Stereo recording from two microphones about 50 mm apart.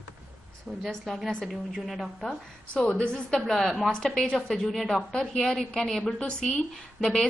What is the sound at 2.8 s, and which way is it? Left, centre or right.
Speech, left.